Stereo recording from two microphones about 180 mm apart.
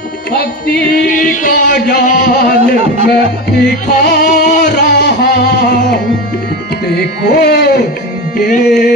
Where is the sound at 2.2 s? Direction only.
70° left (ahead or behind).